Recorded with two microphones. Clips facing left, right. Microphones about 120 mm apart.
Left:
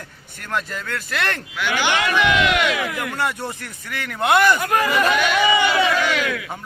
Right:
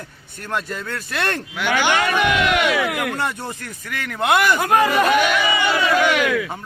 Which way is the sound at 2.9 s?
65° right (ahead or behind).